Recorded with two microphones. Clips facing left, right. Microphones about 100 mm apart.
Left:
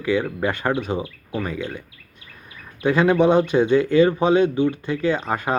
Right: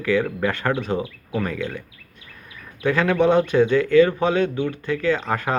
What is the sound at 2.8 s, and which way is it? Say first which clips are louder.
Speech: left 2 dB; 20° left (ahead or behind).